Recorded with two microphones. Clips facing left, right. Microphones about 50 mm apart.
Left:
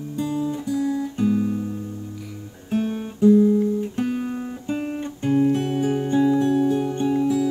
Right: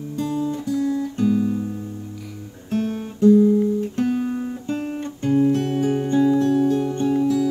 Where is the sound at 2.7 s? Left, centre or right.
Centre.